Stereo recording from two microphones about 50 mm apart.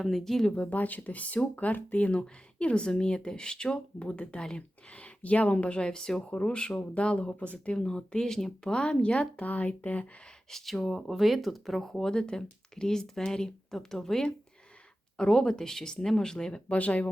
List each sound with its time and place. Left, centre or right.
0.0 s speech: centre
0.5 s speech: left
7.8 s speech: centre
8.7 s speech: left
10.5 s speech: centre
16.7 s speech: left